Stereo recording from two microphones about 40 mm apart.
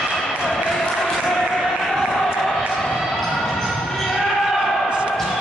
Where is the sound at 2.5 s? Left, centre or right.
Centre.